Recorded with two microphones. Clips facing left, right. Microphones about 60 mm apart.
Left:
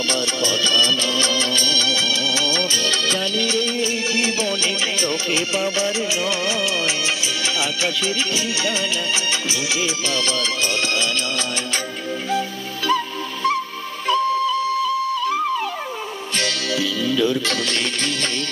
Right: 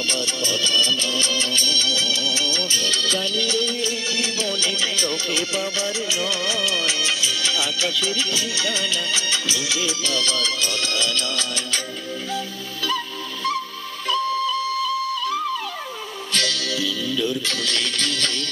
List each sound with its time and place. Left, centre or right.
0.1 s music: left
16.4 s music: left
17.6 s music: left